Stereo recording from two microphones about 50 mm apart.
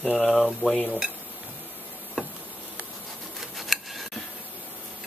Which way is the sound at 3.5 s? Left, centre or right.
Centre.